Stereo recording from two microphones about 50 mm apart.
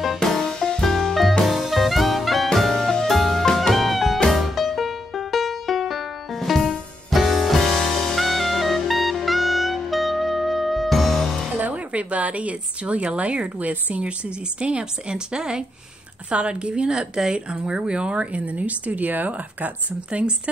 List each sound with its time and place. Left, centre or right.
0.2 s music: centre
1.4 s jazz: centre
2.8 s music: centre
11.5 s speech: right
20.1 s speech: right